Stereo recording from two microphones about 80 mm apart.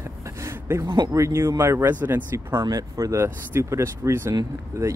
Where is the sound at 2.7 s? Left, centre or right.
Right.